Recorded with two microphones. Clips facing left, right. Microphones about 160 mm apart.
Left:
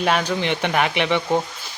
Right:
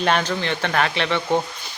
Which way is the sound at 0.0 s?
5° left (ahead or behind).